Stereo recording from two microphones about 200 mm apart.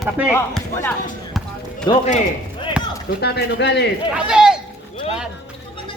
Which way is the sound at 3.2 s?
55° left (ahead or behind).